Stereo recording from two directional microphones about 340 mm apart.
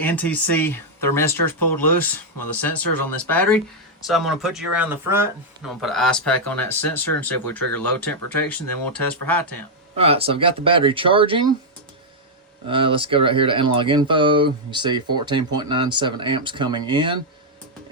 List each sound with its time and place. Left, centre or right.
0.0 s speech: centre
4.0 s speech: centre
10.0 s speech: centre
12.6 s speech: centre